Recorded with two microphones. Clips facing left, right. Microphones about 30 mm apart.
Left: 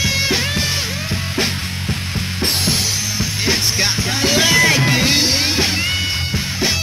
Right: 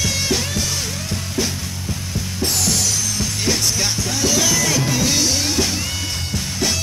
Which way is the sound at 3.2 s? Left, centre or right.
Left.